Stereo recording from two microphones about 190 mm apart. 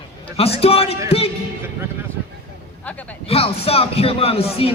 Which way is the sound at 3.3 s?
30° left (ahead or behind).